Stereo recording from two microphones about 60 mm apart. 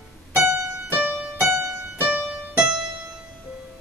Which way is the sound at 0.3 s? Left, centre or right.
Right.